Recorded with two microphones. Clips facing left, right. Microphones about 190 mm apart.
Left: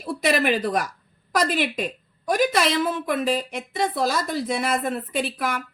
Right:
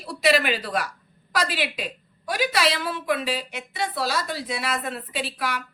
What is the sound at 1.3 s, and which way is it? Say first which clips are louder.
A woman's voice: left 4 dB; 50° left (ahead or behind).